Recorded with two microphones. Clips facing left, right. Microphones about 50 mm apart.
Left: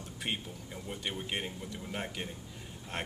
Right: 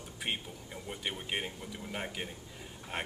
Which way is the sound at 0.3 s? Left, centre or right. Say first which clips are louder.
Even; centre.